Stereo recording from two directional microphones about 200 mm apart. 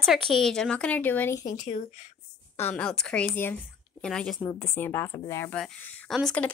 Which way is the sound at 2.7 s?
5° left (ahead or behind).